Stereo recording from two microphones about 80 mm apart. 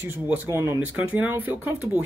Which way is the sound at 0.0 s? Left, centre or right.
Right.